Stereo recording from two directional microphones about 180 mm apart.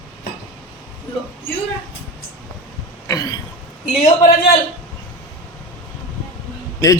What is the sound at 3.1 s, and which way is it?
Throat clearing, 20° left (ahead or behind).